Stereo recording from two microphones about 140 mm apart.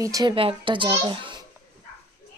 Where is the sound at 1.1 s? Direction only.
35° right (ahead or behind).